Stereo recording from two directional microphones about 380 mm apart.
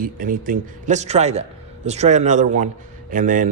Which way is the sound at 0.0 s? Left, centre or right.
Right.